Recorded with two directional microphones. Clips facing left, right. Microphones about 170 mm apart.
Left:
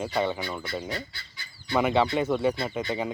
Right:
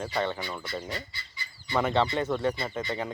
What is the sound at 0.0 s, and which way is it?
Speech, 10° left (ahead or behind).